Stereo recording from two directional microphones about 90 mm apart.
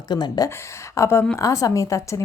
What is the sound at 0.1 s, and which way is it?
Speech, 50° left (ahead or behind).